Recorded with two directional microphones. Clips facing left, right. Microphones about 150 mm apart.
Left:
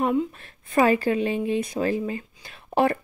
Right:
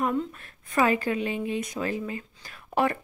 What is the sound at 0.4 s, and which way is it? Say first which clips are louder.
Speech: left 4 dB; 30° left (ahead or behind).